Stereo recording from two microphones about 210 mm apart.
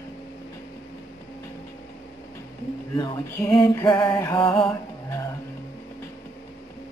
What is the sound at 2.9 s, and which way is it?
Music, 15° left (ahead or behind).